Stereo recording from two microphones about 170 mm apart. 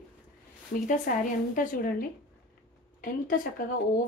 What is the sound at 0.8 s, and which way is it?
Speech, 50° left (ahead or behind).